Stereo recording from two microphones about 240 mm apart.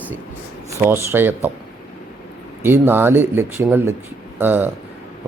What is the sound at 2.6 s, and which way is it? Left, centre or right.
A man's voice, centre.